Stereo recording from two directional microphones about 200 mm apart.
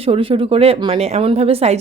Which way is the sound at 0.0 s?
25° right (ahead or behind).